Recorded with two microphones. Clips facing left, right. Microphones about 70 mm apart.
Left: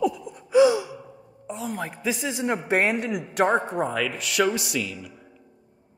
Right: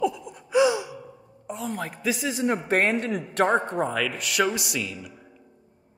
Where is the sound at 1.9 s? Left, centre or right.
Left.